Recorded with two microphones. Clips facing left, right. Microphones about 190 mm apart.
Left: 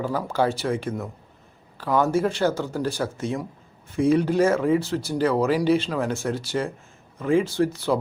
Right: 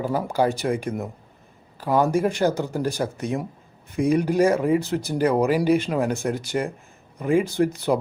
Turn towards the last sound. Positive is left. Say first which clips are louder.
# right 1 dB
turn(degrees=-15)  # may be behind; listen again after turning